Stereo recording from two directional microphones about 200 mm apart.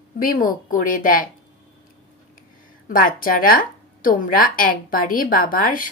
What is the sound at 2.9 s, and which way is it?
A woman's voice, 45° left (ahead or behind).